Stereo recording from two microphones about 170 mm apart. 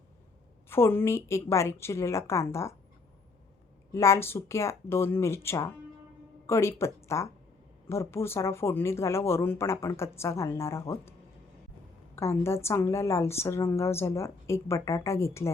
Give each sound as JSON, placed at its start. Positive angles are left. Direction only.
{"t": 0.7, "sound": "a woman's voice", "side_deg": 15}
{"t": 3.9, "sound": "a woman's voice", "side_deg": 15}
{"t": 12.1, "sound": "a woman's voice", "side_deg": 15}